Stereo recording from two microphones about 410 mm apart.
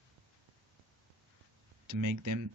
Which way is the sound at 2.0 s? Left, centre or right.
Right.